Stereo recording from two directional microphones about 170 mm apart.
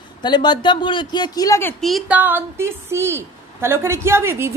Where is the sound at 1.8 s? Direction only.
5° right (ahead or behind).